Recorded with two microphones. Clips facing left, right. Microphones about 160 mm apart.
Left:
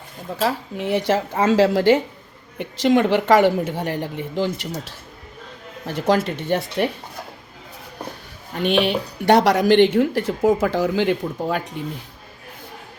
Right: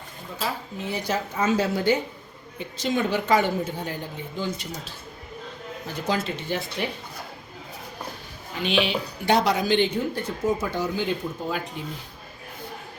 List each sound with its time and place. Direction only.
0.3 s speech: 75° left (ahead or behind)
5.8 s speech: 75° left (ahead or behind)
6.5 s speech: 60° left (ahead or behind)
8.5 s speech: 55° left (ahead or behind); by 11.6 s 75° left (ahead or behind)